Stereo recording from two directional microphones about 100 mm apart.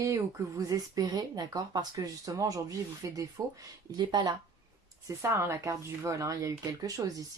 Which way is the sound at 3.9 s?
45° right (ahead or behind).